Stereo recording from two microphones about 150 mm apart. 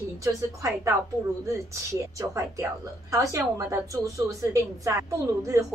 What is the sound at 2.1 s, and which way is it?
A woman's voice, 20° right (ahead or behind).